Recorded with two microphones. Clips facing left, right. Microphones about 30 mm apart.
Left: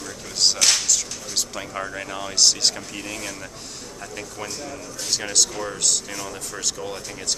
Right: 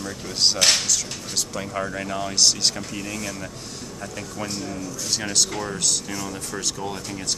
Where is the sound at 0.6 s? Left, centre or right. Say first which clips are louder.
Right 3 dB; right.